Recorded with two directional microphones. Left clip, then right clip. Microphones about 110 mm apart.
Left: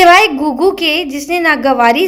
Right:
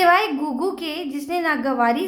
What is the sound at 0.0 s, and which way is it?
A woman's voice, 25° left (ahead or behind).